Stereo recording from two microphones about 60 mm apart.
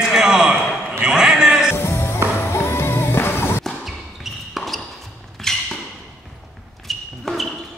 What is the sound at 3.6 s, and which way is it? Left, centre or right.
Basketball bounce, centre.